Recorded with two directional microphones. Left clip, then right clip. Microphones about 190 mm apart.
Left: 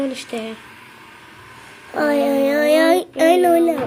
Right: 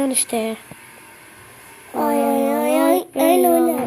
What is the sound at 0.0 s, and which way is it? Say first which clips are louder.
Speech: right 3 dB; 55° right (ahead or behind).